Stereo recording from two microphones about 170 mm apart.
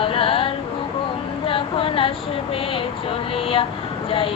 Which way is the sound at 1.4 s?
30° left (ahead or behind).